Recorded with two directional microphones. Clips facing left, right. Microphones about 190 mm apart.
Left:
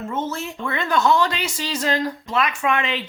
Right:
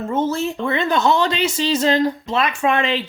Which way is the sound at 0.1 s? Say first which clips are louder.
Right 8 dB; 35° right (ahead or behind).